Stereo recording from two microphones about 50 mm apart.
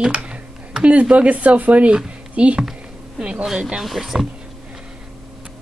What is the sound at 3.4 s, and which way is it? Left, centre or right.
Speech, centre.